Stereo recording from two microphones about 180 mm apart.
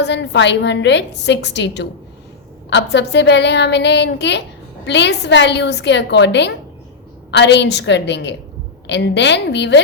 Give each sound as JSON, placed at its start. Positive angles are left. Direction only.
{"t": 0.0, "sound": "a woman's voice", "side_deg": 75}